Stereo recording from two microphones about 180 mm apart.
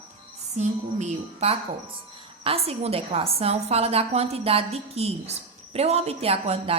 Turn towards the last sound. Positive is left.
turn(degrees=-35)  # may be behind; listen again after turning